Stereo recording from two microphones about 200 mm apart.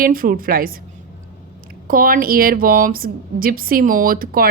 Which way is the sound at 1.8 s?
45° right (ahead or behind).